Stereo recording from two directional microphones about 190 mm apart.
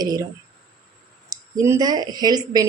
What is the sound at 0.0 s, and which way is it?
Speech, 20° right (ahead or behind).